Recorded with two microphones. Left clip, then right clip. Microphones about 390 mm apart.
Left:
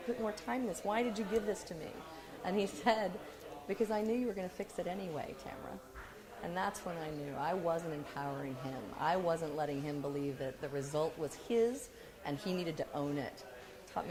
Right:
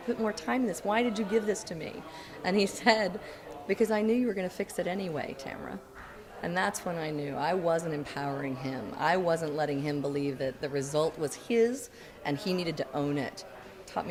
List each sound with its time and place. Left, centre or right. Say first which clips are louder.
0.3 s speech: right 7 dB; left
2.4 s speech: right 7 dB; left
6.4 s speech: right 8 dB; left